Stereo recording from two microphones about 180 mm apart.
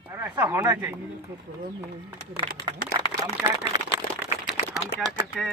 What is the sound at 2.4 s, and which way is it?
Speech, 25° right (ahead or behind).